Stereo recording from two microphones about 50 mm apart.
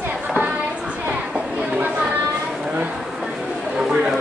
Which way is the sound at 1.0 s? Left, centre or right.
Right.